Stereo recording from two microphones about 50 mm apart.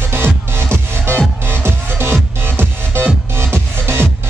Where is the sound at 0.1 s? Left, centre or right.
Right.